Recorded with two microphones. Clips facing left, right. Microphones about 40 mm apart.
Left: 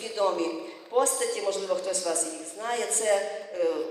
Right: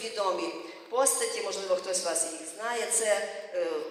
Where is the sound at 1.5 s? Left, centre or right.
Left.